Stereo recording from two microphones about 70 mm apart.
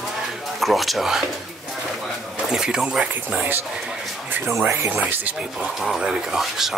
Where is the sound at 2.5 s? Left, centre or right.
Centre.